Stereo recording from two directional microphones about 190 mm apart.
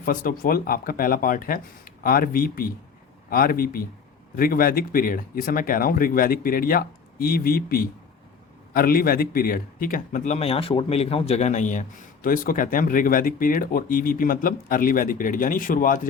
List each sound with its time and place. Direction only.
0.0 s a man's voice: 50° left (ahead or behind)